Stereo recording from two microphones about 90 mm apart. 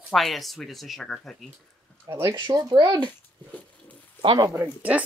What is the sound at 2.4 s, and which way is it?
Speech, 60° right (ahead or behind).